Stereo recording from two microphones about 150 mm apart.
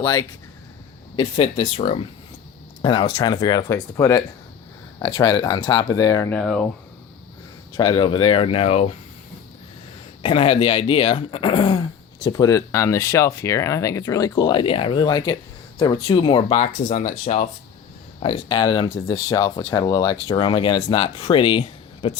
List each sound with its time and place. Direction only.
0.0 s speech: 25° left (ahead or behind)
1.1 s speech: 40° left (ahead or behind)
2.8 s speech: 30° left (ahead or behind)
6.3 s speech: 5° left (ahead or behind)
7.8 s speech: 30° left (ahead or behind)
10.2 s speech: 40° left (ahead or behind)
16.7 s speech: 50° left (ahead or behind)
18.2 s speech: 35° left (ahead or behind)